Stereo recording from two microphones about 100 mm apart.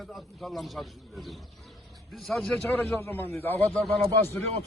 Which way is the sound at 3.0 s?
20° left (ahead or behind).